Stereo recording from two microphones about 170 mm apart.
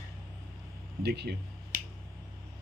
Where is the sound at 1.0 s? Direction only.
80° right.